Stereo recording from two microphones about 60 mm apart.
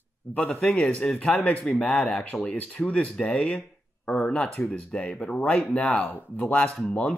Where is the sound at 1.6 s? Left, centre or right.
Centre.